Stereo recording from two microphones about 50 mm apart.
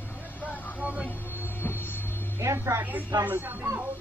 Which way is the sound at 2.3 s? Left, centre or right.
Right.